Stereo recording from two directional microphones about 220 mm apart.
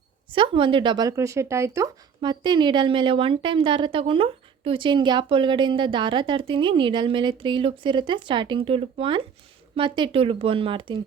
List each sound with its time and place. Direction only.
0.3 s speech: 25° right (ahead or behind)